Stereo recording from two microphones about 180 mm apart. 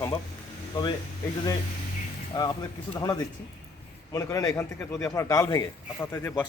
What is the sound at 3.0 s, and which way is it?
A man's voice, 20° left (ahead or behind).